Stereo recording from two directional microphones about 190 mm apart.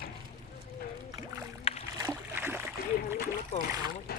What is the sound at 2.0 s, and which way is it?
Splash, 15° right (ahead or behind).